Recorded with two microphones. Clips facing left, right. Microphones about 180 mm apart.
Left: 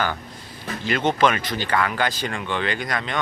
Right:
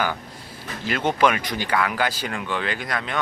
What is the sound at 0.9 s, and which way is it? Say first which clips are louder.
Speech: left 1 dB; 5° right (ahead or behind).